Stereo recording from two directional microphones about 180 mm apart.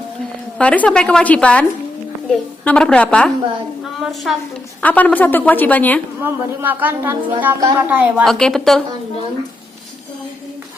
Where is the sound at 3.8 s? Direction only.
Centre (ahead or behind).